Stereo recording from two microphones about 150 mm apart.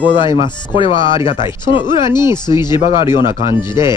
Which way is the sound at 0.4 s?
35° left (ahead or behind).